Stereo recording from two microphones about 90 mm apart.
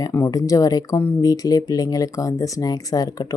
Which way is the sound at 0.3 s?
40° left (ahead or behind).